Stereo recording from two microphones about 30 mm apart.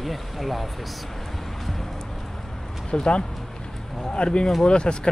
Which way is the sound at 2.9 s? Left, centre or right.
Left.